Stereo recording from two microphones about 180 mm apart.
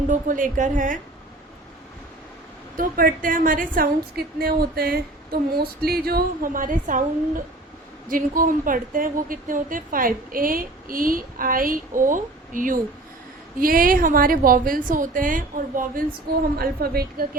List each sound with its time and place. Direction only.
0.1 s a woman's voice: 45° right (ahead or behind)
2.7 s a woman's voice: 50° right (ahead or behind)